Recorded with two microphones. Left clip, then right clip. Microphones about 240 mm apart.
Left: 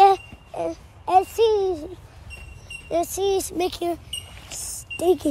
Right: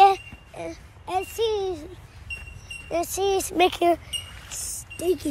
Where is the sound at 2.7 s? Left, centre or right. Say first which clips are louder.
Left 3 dB; centre.